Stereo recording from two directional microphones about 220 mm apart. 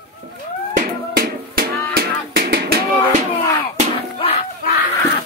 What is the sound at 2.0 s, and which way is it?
Music, 45° right (ahead or behind).